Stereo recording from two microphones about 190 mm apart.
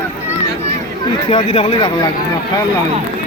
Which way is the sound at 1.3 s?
30° left (ahead or behind).